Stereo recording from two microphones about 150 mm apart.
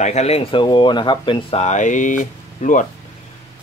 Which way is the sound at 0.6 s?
30° left (ahead or behind).